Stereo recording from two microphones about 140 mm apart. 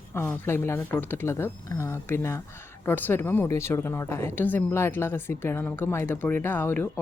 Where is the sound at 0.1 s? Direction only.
15° left (ahead or behind).